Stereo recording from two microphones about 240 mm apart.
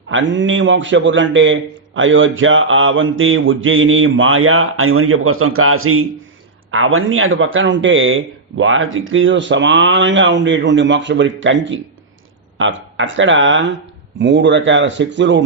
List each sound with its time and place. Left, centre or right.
0.1 s a man's voice: right
2.0 s mantra: right
6.7 s a man's voice: right